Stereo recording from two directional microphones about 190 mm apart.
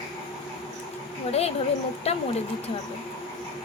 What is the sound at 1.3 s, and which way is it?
Speech, 35° left (ahead or behind).